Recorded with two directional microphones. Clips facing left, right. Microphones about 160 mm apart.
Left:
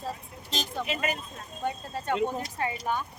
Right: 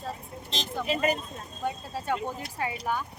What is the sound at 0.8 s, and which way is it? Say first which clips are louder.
Speech: right 8 dB; 35° right (ahead or behind).